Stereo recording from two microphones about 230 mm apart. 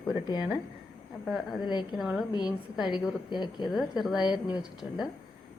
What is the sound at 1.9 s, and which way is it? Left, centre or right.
Speech, centre.